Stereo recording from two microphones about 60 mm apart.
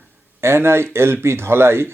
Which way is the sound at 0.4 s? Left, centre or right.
Right.